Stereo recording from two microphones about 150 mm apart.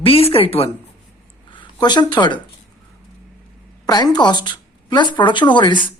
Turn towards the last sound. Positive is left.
turn(degrees=30)  # may be behind; listen again after turning